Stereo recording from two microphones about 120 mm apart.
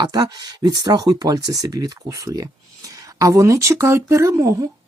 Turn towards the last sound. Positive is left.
turn(degrees=-30)  # may be behind; listen again after turning